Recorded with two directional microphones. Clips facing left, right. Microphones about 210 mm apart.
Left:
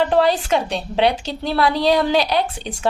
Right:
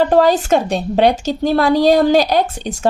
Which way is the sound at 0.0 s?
45° right (ahead or behind).